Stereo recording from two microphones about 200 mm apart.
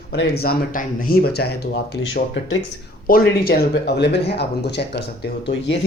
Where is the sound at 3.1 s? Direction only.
45° left (ahead or behind).